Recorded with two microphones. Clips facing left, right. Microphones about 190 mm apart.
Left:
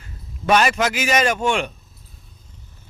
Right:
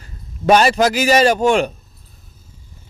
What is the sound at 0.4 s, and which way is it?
A man's voice, 35° right (ahead or behind).